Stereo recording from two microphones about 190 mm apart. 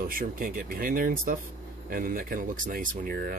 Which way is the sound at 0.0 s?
50° right (ahead or behind).